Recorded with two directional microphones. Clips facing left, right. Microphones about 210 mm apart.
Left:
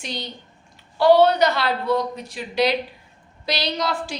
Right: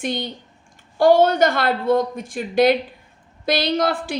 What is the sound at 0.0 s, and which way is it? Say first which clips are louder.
A woman's voice: right 7 dB; 55° right (ahead or behind).